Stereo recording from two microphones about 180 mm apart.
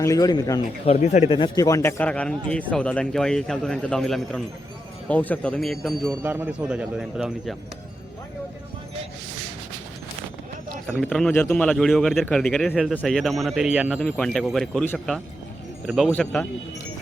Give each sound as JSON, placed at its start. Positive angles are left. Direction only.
{"t": 0.0, "sound": "speech", "side_deg": 20}
{"t": 1.0, "sound": "speech", "side_deg": 40}
{"t": 6.2, "sound": "speech", "side_deg": -10}
{"t": 10.8, "sound": "speech", "side_deg": 0}